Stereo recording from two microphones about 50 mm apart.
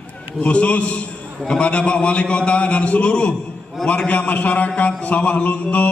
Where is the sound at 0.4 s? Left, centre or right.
Left.